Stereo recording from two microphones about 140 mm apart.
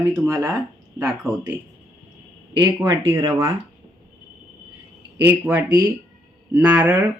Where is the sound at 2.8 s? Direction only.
20° right (ahead or behind).